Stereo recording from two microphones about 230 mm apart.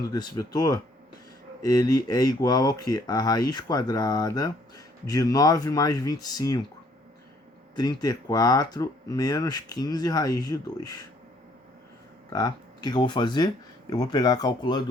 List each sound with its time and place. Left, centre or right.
0.0 s speech: centre
7.8 s speech: centre
12.3 s speech: centre